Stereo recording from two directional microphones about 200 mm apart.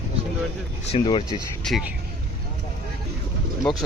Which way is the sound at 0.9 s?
25° left (ahead or behind).